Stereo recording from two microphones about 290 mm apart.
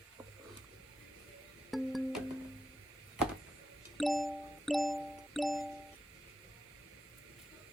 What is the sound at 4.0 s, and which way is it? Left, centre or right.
Music, centre.